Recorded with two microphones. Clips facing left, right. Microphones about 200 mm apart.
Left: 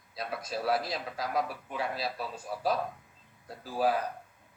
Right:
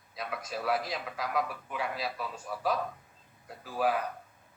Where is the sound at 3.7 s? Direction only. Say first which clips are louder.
Left 1 dB; 35° left (ahead or behind).